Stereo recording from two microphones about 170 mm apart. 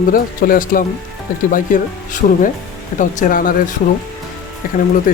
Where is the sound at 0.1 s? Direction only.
55° left (ahead or behind).